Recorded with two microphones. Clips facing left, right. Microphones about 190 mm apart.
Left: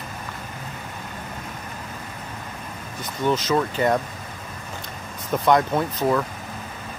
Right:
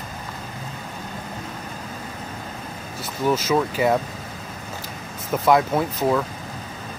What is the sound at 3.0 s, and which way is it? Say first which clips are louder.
Speech: right 1 dB; 5° right (ahead or behind).